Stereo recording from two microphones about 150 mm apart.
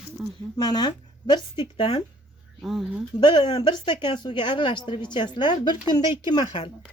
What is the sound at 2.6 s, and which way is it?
Speech, 5° right (ahead or behind).